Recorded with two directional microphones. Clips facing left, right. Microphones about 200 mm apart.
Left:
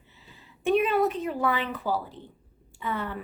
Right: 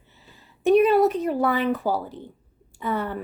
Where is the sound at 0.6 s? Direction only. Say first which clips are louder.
Right 6 dB; 40° right (ahead or behind).